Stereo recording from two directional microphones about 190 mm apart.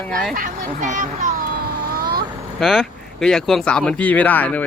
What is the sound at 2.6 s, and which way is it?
Speech, centre (ahead or behind).